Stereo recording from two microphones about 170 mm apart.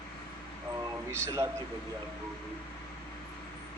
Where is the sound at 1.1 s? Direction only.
15° right (ahead or behind).